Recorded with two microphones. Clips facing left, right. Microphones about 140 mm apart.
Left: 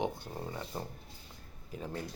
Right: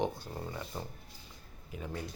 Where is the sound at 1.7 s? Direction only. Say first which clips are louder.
Left 1 dB; 35° left (ahead or behind).